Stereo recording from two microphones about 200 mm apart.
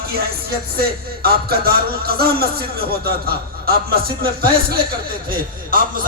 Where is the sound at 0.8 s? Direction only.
50° right (ahead or behind).